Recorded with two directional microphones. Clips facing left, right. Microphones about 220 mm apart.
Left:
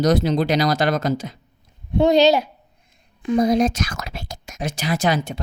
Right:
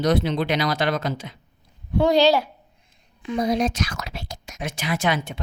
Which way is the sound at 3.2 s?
45° left (ahead or behind).